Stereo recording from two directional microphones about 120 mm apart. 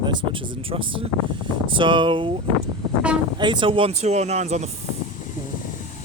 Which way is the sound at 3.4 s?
40° right (ahead or behind).